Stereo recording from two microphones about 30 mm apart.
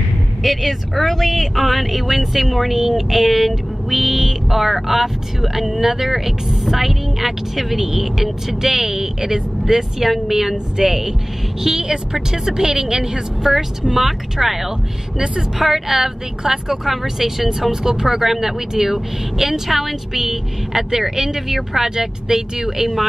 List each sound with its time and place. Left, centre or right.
0.4 s speech: centre
10.0 s a woman's voice: centre; by 13.2 s right
13.4 s speech: centre
21.8 s speech: centre